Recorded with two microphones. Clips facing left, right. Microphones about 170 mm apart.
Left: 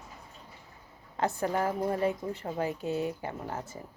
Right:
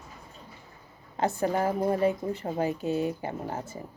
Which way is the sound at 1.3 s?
30° right (ahead or behind).